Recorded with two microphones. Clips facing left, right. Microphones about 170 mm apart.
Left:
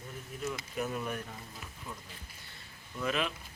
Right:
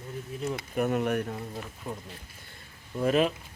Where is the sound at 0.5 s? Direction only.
60° right (ahead or behind).